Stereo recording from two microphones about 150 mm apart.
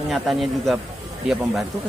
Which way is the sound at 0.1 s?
Centre (ahead or behind).